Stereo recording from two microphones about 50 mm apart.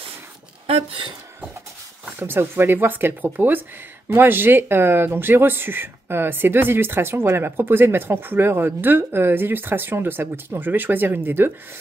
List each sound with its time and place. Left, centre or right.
2.1 s speech: right